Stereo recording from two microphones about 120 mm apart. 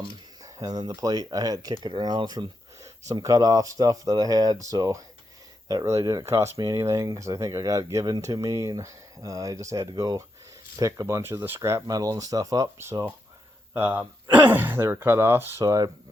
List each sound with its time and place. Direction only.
0.4 s speech: 30° right (ahead or behind)
1.7 s speech: 45° right (ahead or behind)